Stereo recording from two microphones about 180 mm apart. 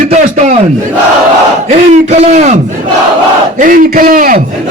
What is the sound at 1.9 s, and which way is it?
Speech, 40° right (ahead or behind).